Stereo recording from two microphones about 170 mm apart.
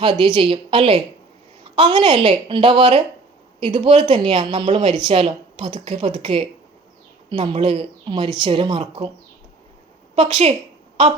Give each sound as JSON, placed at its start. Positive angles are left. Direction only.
{"t": 0.0, "sound": "a woman's voice", "side_deg": -30}
{"t": 4.7, "sound": "a woman's voice", "side_deg": -40}
{"t": 10.2, "sound": "a woman's voice", "side_deg": -40}